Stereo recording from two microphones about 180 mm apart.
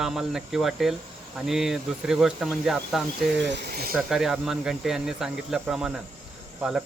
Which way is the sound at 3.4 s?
70° right (ahead or behind).